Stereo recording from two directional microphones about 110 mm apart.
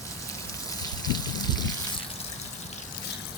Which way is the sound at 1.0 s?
40° left (ahead or behind).